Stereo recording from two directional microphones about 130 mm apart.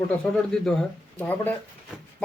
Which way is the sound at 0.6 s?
5° left (ahead or behind).